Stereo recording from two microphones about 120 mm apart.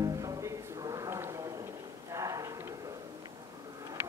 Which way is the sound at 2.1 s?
30° right (ahead or behind).